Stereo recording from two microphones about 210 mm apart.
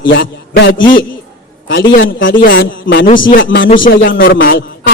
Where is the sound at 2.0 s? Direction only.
65° left (ahead or behind).